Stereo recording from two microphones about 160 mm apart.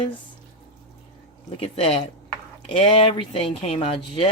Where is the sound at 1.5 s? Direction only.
40° left (ahead or behind).